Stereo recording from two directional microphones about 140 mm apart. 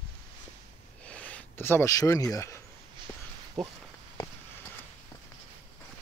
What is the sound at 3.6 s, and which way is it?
Speech, 5° left (ahead or behind).